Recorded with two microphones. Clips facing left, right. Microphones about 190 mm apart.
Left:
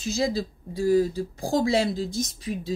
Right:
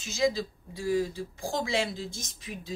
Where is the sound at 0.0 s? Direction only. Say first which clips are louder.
Left 2 dB; 35° left (ahead or behind).